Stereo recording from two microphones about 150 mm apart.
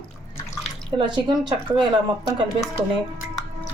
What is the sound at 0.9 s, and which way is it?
Speech, 30° right (ahead or behind).